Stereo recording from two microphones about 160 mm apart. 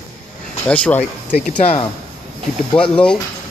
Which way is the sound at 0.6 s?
10° left (ahead or behind).